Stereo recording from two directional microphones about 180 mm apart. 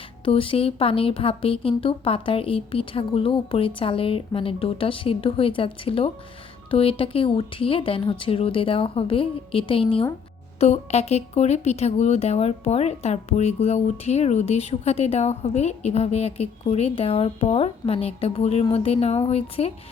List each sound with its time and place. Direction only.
0.3 s speech: 30° left (ahead or behind)